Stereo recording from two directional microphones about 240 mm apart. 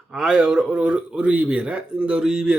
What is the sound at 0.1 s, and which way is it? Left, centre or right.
Speech, centre.